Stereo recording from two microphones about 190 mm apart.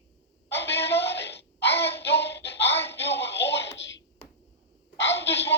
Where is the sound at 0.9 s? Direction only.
65° left (ahead or behind).